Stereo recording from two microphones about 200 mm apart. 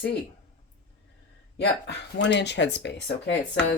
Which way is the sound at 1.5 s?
60° left (ahead or behind).